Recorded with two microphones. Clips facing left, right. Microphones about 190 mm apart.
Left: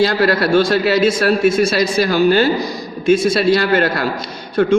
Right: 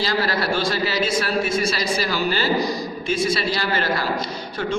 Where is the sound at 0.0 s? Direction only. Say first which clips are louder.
Left 8 dB; 60° left (ahead or behind).